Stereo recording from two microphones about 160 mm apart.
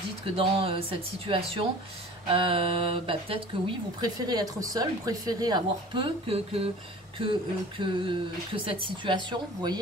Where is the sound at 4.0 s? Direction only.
25° right (ahead or behind).